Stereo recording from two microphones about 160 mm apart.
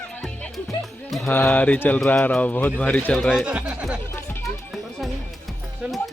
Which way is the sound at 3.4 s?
5° right (ahead or behind).